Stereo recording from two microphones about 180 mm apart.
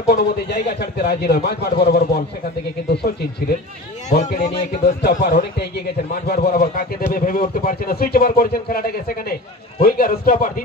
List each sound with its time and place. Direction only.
0.1 s speech: 60° left (ahead or behind)
4.1 s a man's voice: 45° left (ahead or behind)
5.0 s a man's voice: 60° left (ahead or behind)